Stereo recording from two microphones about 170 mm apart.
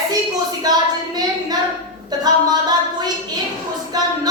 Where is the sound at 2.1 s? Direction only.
25° right (ahead or behind).